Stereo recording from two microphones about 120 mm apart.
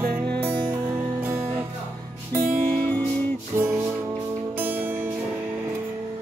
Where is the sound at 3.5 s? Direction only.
20° right (ahead or behind).